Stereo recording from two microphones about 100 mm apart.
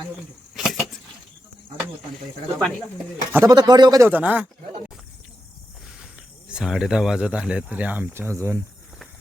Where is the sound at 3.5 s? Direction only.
45° right (ahead or behind).